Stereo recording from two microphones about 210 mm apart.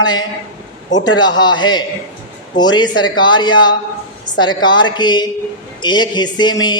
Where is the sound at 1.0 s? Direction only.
20° left (ahead or behind).